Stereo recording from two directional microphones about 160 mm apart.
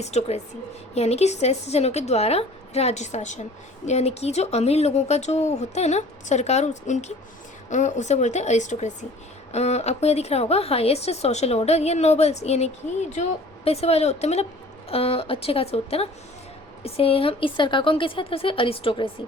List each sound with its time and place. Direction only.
0.0 s a woman's voice: 45° left (ahead or behind)